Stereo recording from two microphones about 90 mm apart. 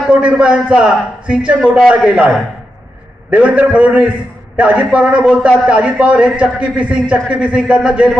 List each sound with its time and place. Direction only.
0.1 s a man's voice: 15° right (ahead or behind)